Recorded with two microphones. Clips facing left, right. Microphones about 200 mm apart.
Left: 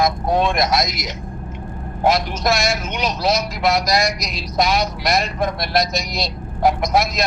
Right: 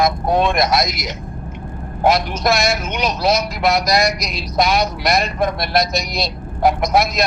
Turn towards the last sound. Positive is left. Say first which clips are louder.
# right 2 dB
turn(degrees=-60)  # may be behind; listen again after turning